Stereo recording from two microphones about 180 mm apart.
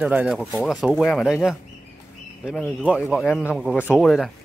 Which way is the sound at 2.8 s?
5° right (ahead or behind).